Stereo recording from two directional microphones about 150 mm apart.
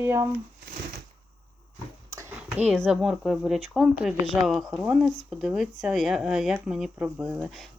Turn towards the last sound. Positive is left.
turn(degrees=0)  # may be behind; listen again after turning